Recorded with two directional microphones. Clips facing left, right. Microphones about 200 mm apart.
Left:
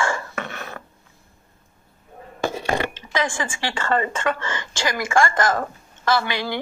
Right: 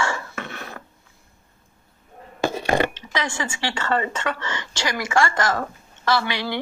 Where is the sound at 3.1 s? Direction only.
50° left (ahead or behind).